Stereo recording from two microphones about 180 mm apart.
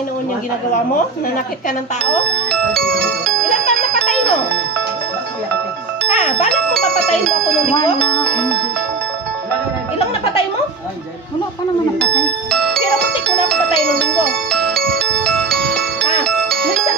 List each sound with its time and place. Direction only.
6.1 s music: 40° left (ahead or behind)
9.9 s music: 30° left (ahead or behind)
12.0 s music: 5° left (ahead or behind)